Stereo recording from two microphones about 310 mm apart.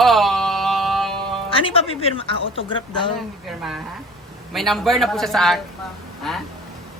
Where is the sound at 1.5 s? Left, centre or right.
Centre.